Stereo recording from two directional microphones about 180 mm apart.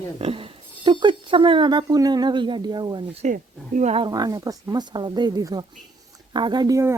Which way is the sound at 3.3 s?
45° right (ahead or behind).